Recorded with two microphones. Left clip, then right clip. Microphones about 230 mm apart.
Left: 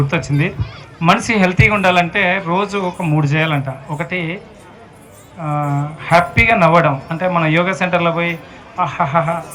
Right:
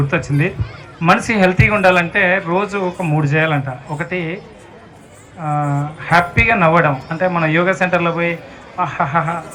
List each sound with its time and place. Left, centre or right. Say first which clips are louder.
0.0 s speech: even; left
5.4 s speech: right 1 dB; left